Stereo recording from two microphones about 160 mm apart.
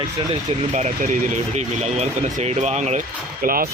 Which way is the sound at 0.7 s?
50° right (ahead or behind).